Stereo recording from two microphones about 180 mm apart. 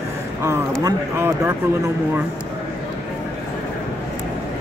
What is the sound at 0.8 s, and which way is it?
Speech, 15° right (ahead or behind).